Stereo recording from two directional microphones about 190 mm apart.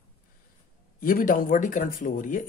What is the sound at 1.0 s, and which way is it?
Speech, 45° left (ahead or behind).